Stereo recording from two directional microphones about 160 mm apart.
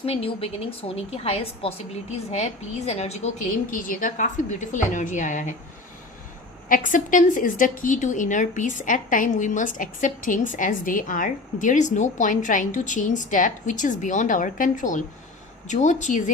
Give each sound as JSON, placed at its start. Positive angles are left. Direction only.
{"t": 0.0, "sound": "a woman's voice", "side_deg": 40}
{"t": 6.7, "sound": "a woman's voice", "side_deg": 55}